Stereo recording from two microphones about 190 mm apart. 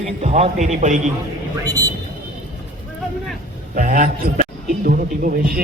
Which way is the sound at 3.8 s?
45° right (ahead or behind).